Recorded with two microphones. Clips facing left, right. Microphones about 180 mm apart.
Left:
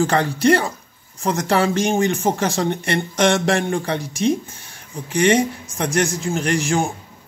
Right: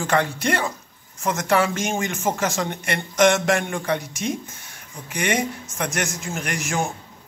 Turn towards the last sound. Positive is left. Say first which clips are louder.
# left 6 dB
turn(degrees=30)  # may be behind; listen again after turning